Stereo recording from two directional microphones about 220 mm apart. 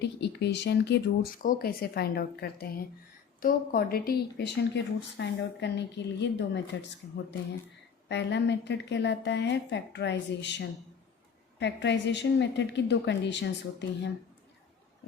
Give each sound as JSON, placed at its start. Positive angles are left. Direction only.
{"t": 0.0, "sound": "speech", "side_deg": 50}
{"t": 8.0, "sound": "speech", "side_deg": 50}